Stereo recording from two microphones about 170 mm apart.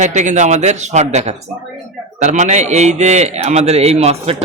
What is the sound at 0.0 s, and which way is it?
A man's voice, 45° right (ahead or behind).